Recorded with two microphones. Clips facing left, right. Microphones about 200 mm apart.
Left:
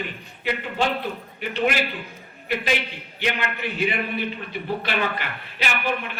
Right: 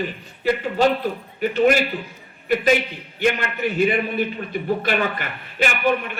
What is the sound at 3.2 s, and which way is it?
Speech, 45° right (ahead or behind).